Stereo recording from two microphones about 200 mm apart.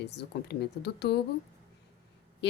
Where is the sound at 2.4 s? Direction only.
60° left (ahead or behind).